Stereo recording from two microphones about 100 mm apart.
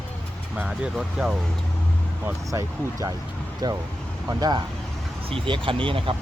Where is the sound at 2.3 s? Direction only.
30° right (ahead or behind).